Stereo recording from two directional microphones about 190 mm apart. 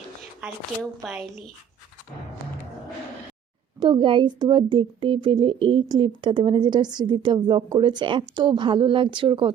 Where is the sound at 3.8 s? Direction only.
25° right (ahead or behind).